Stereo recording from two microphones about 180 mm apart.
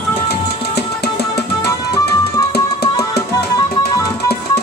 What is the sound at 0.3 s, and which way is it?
Music, 60° left (ahead or behind).